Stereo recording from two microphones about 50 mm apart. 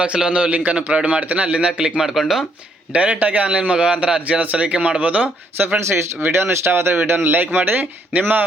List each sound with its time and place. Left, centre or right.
0.0 s a man's voice: centre
0.5 s a man's voice: right
2.0 s speech: centre
2.9 s a man's voice: right
3.5 s a man's voice: right
4.2 s a man's voice: right
5.9 s a man's voice: right